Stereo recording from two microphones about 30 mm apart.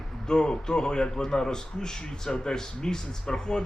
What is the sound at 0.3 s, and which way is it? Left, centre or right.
A man's voice, left.